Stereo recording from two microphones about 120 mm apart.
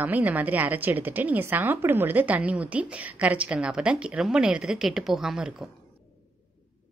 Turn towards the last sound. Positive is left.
turn(degrees=-5)  # may be behind; listen again after turning